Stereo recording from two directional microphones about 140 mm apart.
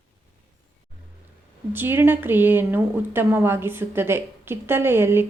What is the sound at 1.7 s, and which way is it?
A woman's voice, 15° right (ahead or behind).